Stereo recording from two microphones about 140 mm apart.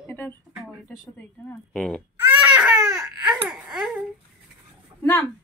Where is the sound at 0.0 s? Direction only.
15° left (ahead or behind).